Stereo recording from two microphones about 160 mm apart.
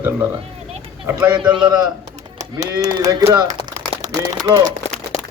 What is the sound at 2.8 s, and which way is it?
Speech, 20° right (ahead or behind).